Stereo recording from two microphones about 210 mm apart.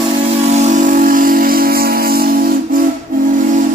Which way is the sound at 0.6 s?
35° right (ahead or behind).